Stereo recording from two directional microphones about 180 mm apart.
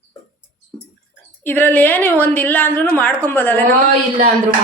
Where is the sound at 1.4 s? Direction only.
10° left (ahead or behind).